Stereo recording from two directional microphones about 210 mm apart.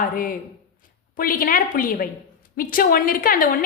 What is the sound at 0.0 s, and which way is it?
A woman's voice, 40° left (ahead or behind).